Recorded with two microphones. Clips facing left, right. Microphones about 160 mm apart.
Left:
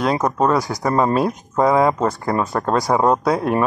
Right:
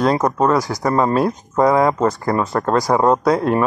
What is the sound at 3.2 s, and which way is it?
Speech, 20° left (ahead or behind).